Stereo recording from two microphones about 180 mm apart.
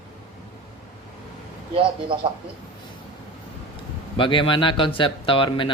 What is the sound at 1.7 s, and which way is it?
Speech, 30° right (ahead or behind).